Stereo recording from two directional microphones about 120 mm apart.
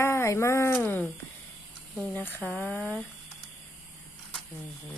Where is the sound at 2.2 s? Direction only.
15° left (ahead or behind).